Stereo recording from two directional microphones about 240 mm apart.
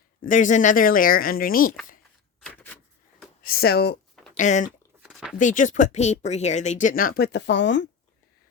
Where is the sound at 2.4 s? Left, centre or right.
Centre.